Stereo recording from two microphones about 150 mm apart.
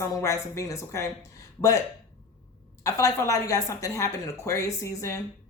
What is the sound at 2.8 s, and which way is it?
Speech, 20° left (ahead or behind).